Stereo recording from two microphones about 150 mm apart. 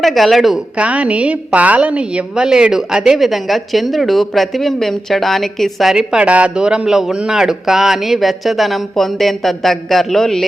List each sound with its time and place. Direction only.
0.0 s a woman's voice: centre (ahead or behind)